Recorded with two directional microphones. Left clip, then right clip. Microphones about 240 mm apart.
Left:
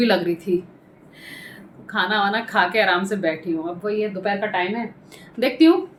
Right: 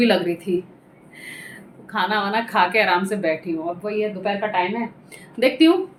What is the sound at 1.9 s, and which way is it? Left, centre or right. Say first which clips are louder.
A woman's voice: left 1 dB; centre.